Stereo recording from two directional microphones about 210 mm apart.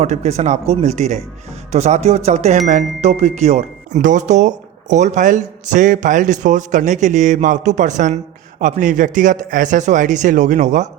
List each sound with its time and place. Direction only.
0.0 s speech: 30° right (ahead or behind)